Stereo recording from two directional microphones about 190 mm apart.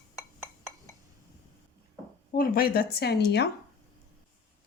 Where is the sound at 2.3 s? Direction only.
50° left (ahead or behind).